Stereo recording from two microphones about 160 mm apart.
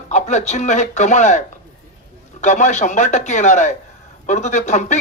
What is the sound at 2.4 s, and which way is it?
Speech, 45° left (ahead or behind).